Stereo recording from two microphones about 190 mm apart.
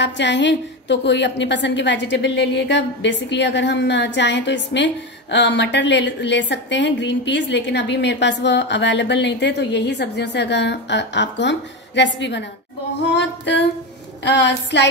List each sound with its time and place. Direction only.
0.0 s a woman's voice: 70° left (ahead or behind)